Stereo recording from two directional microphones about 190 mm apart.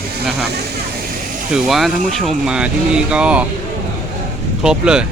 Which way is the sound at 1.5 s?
Centre (ahead or behind).